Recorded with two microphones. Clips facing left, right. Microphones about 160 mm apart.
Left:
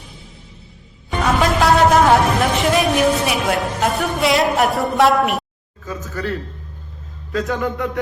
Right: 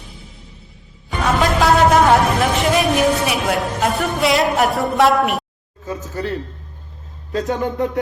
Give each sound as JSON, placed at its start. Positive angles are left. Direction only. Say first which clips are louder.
{"t": 1.2, "sound": "a man's voice", "louder": "even", "side_deg": 0}
{"t": 5.8, "sound": "speech", "louder": "right 1 dB", "side_deg": -30}
{"t": 7.3, "sound": "speech", "louder": "right 1 dB", "side_deg": -30}